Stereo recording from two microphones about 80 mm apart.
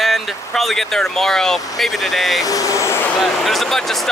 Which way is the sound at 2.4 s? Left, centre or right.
Left.